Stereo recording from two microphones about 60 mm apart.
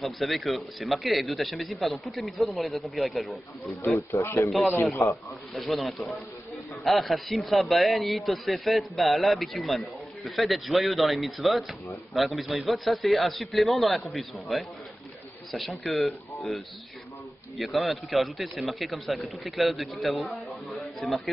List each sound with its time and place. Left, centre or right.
0.0 s a man's voice: centre
4.1 s speech: left
5.1 s a man's voice: centre